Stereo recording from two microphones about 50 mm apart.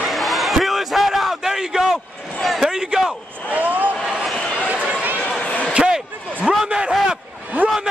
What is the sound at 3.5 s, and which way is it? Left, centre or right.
Vehicle, right.